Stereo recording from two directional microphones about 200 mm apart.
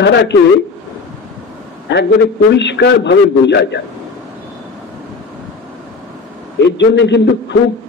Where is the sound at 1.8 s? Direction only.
60° left (ahead or behind).